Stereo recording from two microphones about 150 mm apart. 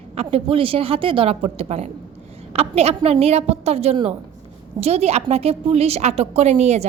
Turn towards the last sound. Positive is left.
turn(degrees=-45)  # may be behind; listen again after turning